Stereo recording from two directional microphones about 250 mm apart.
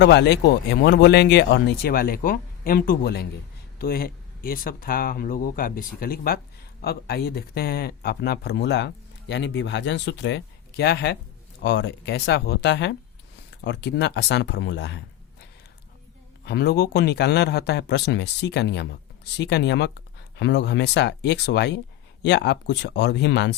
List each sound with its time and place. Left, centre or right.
0.0 s speech: left
16.5 s speech: left